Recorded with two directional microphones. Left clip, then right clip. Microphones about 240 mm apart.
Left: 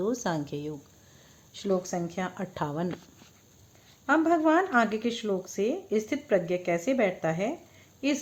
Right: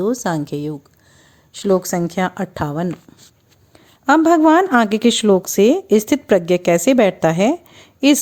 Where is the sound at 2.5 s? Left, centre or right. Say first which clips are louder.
Right 9 dB; right.